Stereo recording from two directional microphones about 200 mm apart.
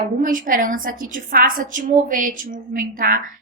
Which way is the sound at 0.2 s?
40° right (ahead or behind).